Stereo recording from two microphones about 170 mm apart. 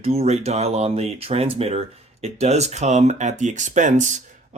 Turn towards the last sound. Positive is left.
turn(degrees=-45)  # may be behind; listen again after turning